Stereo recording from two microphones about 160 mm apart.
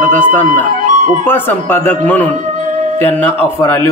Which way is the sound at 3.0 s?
10° left (ahead or behind).